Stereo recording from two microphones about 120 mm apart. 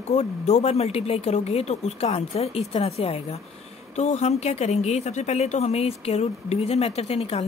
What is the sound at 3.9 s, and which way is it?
Speech, 70° left (ahead or behind).